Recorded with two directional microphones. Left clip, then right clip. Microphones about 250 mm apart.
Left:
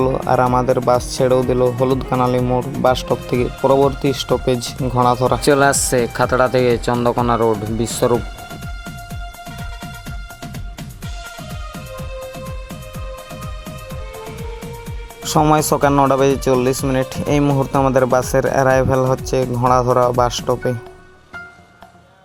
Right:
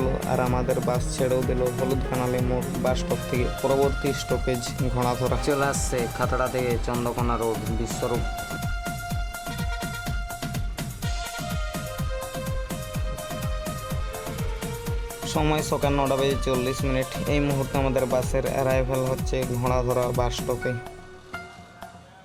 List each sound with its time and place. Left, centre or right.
0.3 s speech: left
15.2 s speech: left